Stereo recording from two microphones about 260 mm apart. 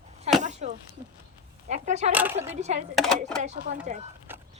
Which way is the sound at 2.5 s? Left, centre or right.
Right.